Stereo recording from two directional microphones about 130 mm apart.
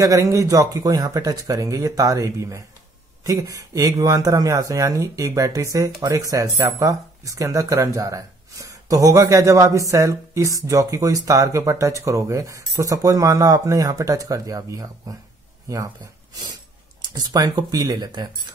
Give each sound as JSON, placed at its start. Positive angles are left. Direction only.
{"t": 0.0, "sound": "speech", "side_deg": -25}
{"t": 17.0, "sound": "speech", "side_deg": -30}